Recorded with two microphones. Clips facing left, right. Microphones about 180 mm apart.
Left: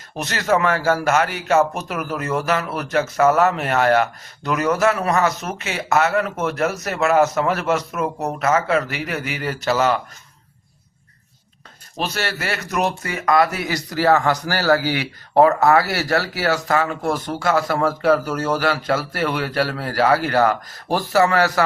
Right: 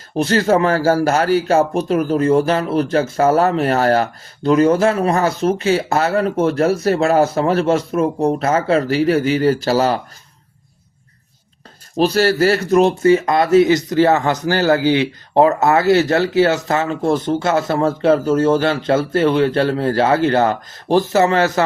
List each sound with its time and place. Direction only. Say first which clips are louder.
0.2 s a man's voice: right 5 dB; 30° right (ahead or behind)
11.9 s speech: right 11 dB; 35° right (ahead or behind)